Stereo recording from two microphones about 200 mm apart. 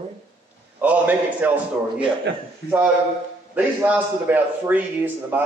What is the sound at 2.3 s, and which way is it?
Speech, 60° right (ahead or behind).